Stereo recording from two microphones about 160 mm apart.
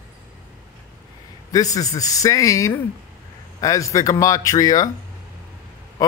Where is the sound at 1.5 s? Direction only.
20° left (ahead or behind).